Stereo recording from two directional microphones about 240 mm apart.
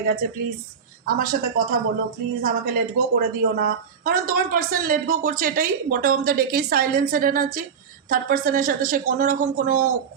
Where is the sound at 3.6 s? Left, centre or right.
Right.